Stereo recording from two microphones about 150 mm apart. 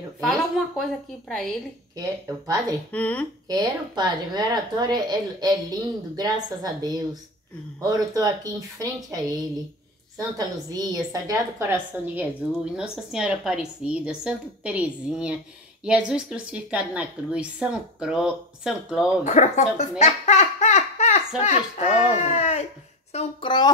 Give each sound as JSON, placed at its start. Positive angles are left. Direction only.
{"t": 0.2, "sound": "speech", "side_deg": 0}
{"t": 2.0, "sound": "a woman's voice", "side_deg": -25}
{"t": 2.9, "sound": "speech", "side_deg": 10}
{"t": 3.4, "sound": "a woman's voice", "side_deg": -30}
{"t": 12.7, "sound": "a woman's voice", "side_deg": -5}
{"t": 19.2, "sound": "a child's voice", "side_deg": 50}
{"t": 23.1, "sound": "a woman's voice", "side_deg": 30}